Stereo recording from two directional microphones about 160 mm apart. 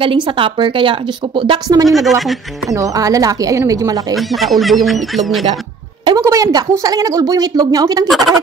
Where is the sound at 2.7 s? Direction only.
20° right (ahead or behind).